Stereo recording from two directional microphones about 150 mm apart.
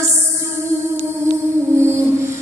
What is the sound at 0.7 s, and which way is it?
Music, 20° right (ahead or behind).